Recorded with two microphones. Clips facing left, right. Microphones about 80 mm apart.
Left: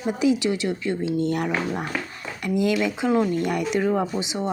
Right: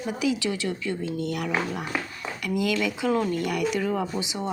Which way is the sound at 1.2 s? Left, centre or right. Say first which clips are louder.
Left 4 dB; left.